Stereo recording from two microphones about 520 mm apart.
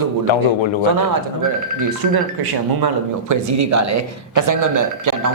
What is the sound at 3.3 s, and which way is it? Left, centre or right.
Speech, right.